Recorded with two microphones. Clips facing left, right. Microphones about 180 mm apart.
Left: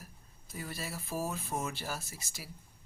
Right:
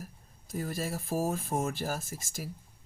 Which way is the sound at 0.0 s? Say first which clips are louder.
Right 8 dB; 45° right (ahead or behind).